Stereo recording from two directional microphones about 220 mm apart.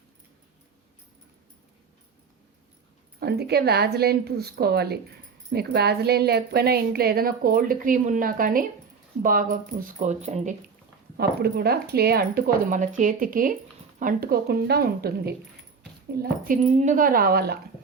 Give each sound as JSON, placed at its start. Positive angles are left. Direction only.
{"t": 3.2, "sound": "speech", "side_deg": -45}
{"t": 11.2, "sound": "speech", "side_deg": -45}